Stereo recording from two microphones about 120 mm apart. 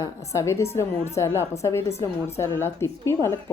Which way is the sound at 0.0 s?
25° left (ahead or behind).